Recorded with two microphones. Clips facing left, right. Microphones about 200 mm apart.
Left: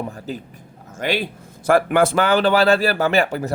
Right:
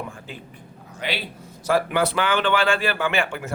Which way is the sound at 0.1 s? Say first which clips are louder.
Left 8 dB; 40° left (ahead or behind).